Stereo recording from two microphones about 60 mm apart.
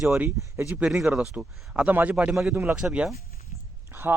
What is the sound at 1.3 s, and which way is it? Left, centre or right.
Speech, right.